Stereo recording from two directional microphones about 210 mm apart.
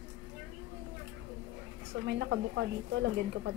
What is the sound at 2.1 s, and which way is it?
A woman's voice, 60° right (ahead or behind).